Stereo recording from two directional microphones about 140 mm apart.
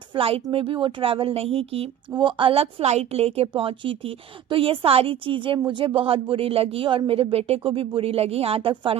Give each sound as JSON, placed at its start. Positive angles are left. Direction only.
{"t": 0.1, "sound": "a woman's voice", "side_deg": -40}